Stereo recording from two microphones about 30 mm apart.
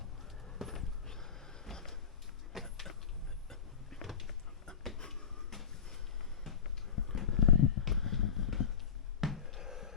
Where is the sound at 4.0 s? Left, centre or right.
Centre.